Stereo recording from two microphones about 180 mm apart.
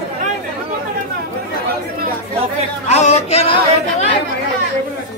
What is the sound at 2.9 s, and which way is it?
Speech, 40° left (ahead or behind).